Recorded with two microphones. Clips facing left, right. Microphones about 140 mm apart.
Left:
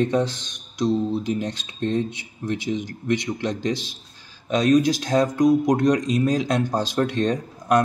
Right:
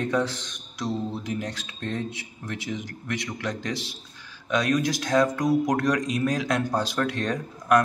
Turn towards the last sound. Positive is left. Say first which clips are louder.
# left 1 dB
turn(degrees=25)  # may be behind; listen again after turning